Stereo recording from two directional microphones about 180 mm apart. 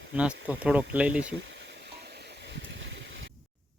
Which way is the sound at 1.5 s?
80° right.